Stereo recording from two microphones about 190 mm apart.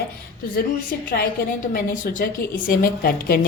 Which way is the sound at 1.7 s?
45° left (ahead or behind).